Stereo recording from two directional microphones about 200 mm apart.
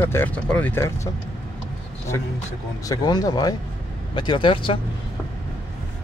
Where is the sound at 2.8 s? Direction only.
20° left (ahead or behind).